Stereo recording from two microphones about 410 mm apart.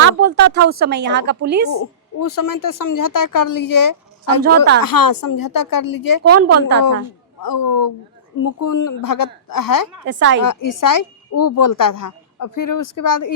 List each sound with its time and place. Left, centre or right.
0.0 s speech: right
1.8 s a woman's voice: left
4.4 s speech: right
4.8 s a woman's voice: left
6.2 s a woman's voice: right
6.6 s speech: right
7.4 s a man's voice: left
10.1 s speech: right
10.4 s a woman's voice: left